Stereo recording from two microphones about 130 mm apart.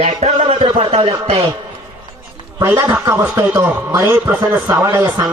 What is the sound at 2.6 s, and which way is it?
A man's voice, 20° right (ahead or behind).